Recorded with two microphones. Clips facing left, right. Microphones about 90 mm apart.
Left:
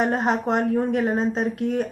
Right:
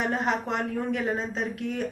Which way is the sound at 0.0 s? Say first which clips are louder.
Left 5 dB; 40° left (ahead or behind).